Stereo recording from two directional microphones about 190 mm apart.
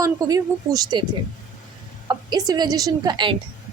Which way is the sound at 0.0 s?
15° right (ahead or behind).